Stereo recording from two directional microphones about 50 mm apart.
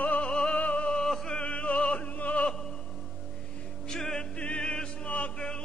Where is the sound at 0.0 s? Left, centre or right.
Left.